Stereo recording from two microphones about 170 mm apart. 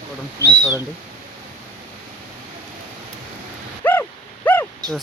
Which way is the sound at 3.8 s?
10° left (ahead or behind).